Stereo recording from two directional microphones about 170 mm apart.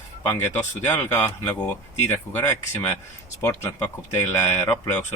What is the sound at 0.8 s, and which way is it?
Speech, 15° left (ahead or behind).